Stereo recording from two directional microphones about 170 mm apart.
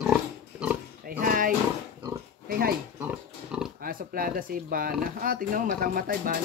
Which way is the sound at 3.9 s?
60° right (ahead or behind).